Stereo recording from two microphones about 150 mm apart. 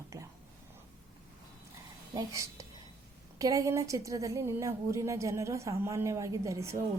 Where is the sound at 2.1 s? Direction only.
20° right (ahead or behind).